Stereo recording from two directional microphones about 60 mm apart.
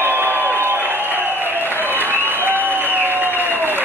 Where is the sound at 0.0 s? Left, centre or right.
Right.